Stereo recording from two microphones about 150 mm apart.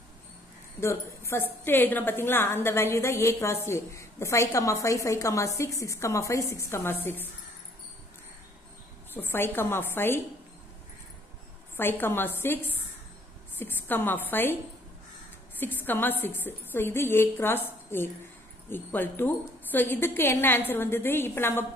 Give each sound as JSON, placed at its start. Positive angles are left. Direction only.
{"t": 0.7, "sound": "a woman's voice", "side_deg": 20}
{"t": 9.1, "sound": "a woman's voice", "side_deg": 15}
{"t": 11.7, "sound": "a woman's voice", "side_deg": 15}
{"t": 15.6, "sound": "a woman's voice", "side_deg": 15}